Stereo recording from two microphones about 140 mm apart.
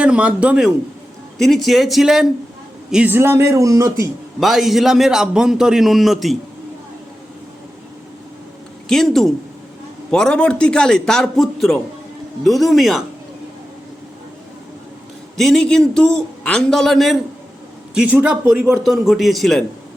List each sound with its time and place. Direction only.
0.0 s a man's voice: 10° right (ahead or behind)
4.4 s a man's voice: centre (ahead or behind)
8.9 s a man's voice: centre (ahead or behind)
15.4 s a man's voice: 5° left (ahead or behind)
17.9 s a man's voice: 10° right (ahead or behind)